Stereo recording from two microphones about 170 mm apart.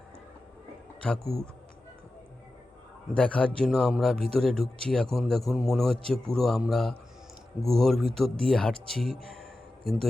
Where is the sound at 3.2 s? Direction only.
5° left (ahead or behind).